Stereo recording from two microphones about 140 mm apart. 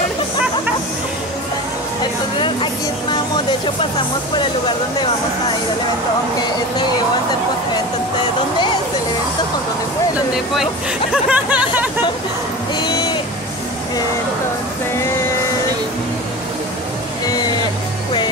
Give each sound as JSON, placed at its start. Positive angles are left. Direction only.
{"t": 2.3, "sound": "speech", "side_deg": 35}
{"t": 10.5, "sound": "speech", "side_deg": 0}
{"t": 12.7, "sound": "a sound", "side_deg": 35}